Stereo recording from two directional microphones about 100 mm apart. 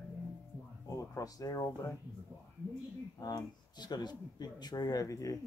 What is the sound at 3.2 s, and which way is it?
Speech, 45° left (ahead or behind).